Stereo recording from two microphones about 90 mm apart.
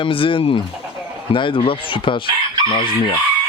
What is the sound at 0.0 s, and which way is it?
Speech, 75° left (ahead or behind).